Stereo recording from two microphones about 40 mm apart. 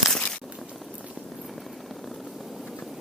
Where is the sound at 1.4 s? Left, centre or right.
Centre.